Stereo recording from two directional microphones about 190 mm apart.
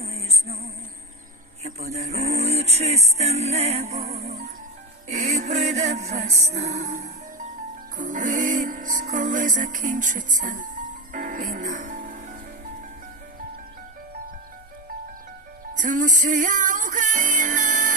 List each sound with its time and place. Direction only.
0.0 s music: 35° right (ahead or behind)
15.7 s music: 40° right (ahead or behind)